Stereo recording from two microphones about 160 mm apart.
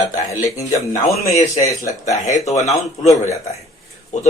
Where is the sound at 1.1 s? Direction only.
40° left (ahead or behind).